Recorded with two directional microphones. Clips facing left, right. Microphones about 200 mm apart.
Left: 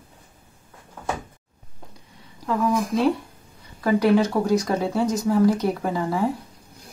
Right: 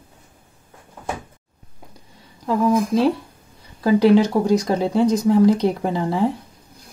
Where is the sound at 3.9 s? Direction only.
25° right (ahead or behind).